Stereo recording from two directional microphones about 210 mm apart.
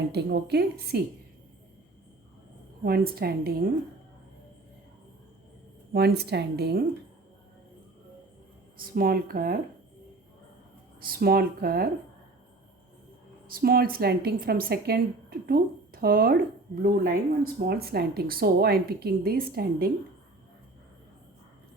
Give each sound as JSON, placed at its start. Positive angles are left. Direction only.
{"t": 0.1, "sound": "speech", "side_deg": -50}
{"t": 2.8, "sound": "speech", "side_deg": -45}
{"t": 5.9, "sound": "speech", "side_deg": -50}
{"t": 8.8, "sound": "speech", "side_deg": -45}
{"t": 11.0, "sound": "speech", "side_deg": -45}
{"t": 13.5, "sound": "speech", "side_deg": -45}